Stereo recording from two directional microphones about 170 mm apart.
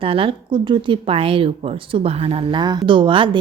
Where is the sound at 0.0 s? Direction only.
30° right (ahead or behind).